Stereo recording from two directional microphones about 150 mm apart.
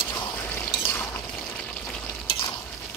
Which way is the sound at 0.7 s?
15° left (ahead or behind).